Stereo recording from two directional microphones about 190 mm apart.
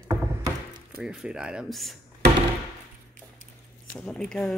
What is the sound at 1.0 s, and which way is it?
Speech, centre (ahead or behind).